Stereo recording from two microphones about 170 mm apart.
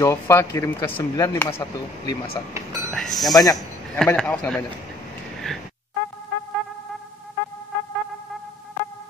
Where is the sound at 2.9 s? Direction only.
Centre (ahead or behind).